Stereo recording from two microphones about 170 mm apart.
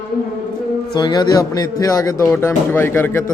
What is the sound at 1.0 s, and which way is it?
A man's voice, 25° left (ahead or behind).